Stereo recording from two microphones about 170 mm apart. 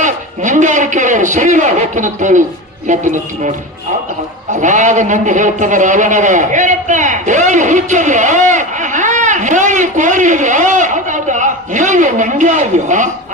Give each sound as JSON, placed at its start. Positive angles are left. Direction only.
{"t": 0.0, "sound": "a sound", "side_deg": -45}
{"t": 2.8, "sound": "a man's voice", "side_deg": -45}
{"t": 4.6, "sound": "a man's voice", "side_deg": -45}